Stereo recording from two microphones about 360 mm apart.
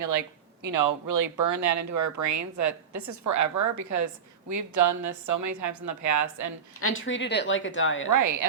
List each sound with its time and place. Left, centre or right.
0.6 s speech: right
6.7 s a woman's voice: left
8.1 s speech: right